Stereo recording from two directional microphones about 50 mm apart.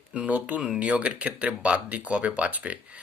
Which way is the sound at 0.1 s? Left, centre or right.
Right.